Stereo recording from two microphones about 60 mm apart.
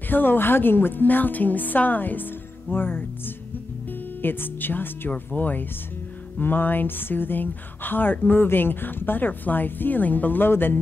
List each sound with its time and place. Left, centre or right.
0.1 s speech: left
4.2 s speech: left